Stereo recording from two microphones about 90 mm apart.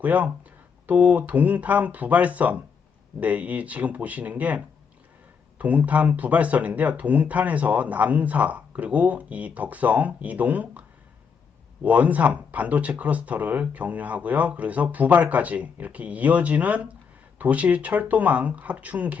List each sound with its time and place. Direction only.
0.0 s speech: 20° right (ahead or behind)